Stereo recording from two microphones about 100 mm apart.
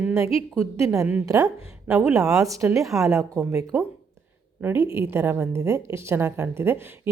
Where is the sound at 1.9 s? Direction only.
20° right (ahead or behind).